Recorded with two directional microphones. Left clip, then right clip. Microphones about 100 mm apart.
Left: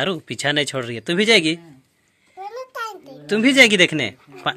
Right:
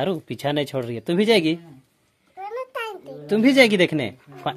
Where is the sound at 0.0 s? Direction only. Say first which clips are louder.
Left 3 dB; 15° right (ahead or behind).